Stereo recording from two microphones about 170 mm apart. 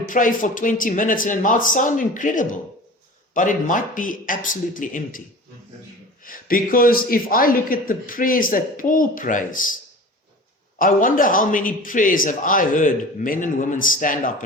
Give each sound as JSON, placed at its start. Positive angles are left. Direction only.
{"t": 0.1, "sound": "a man's voice", "side_deg": 50}
{"t": 6.2, "sound": "speech", "side_deg": 55}
{"t": 10.8, "sound": "a man's voice", "side_deg": 50}